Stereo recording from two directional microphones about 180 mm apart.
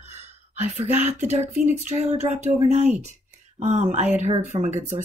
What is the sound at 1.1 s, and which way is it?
Speech, 35° right (ahead or behind).